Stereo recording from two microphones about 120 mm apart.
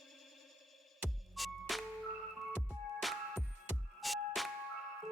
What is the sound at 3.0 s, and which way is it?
Music, centre (ahead or behind).